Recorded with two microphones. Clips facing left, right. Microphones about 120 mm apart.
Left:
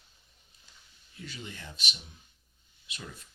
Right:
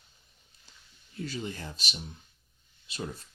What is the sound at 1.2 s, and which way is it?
Speech, 35° right (ahead or behind).